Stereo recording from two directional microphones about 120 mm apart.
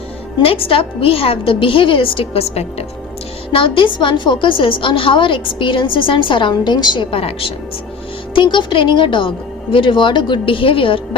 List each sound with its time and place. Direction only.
0.4 s a woman's voice: 50° left (ahead or behind)
3.5 s a woman's voice: 45° left (ahead or behind)